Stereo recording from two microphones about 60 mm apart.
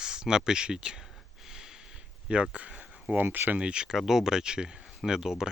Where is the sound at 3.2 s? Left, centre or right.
Right.